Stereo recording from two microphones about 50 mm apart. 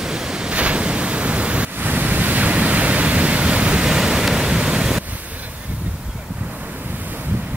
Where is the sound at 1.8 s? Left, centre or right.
Right; by 5.0 s centre.